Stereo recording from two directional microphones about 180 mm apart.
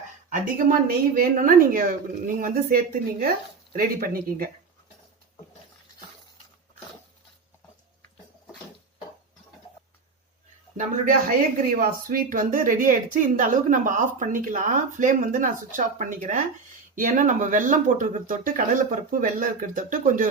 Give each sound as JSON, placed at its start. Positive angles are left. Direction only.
{"t": 0.3, "sound": "a woman's voice", "side_deg": -50}
{"t": 10.8, "sound": "a woman's voice", "side_deg": -45}